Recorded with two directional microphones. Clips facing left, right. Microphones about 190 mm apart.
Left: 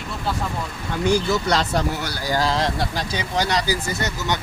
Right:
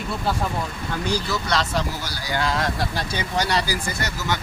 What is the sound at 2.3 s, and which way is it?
Speech, 30° left (ahead or behind).